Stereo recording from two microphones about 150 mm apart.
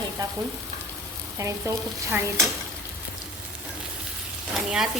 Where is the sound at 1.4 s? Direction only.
20° right (ahead or behind).